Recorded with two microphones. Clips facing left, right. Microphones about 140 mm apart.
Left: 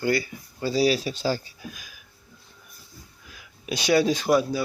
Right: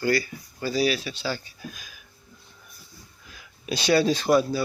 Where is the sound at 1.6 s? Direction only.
10° left (ahead or behind).